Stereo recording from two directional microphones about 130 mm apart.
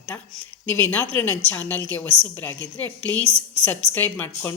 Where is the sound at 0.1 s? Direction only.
10° left (ahead or behind).